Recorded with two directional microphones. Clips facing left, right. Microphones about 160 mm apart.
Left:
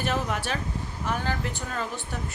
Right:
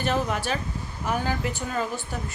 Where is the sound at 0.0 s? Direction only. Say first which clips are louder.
Right 2 dB; centre (ahead or behind).